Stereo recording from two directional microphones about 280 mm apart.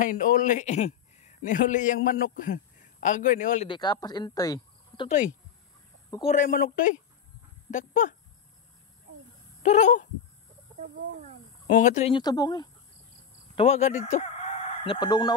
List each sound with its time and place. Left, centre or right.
0.0 s a man's voice: left
6.0 s speech: centre
6.3 s speech: left
7.7 s speech: left
9.6 s a sound: left
10.8 s speech: right
11.6 s speech: left
13.6 s speech: left